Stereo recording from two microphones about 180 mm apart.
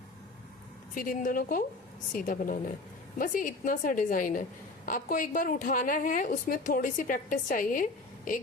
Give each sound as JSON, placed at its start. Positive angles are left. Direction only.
{"t": 0.9, "sound": "a woman's voice", "side_deg": 50}